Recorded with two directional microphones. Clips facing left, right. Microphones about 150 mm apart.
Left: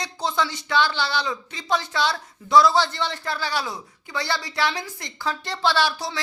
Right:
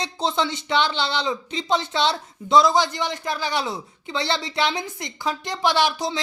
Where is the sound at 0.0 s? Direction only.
25° right (ahead or behind).